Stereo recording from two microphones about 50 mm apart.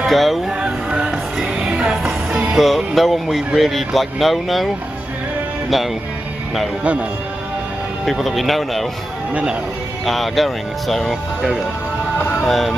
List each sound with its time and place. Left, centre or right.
0.0 s speech: centre
0.8 s music: right
2.5 s music: centre
2.9 s speech: centre
6.8 s speech: right
8.0 s speech: centre
10.0 s speech: centre
12.4 s speech: centre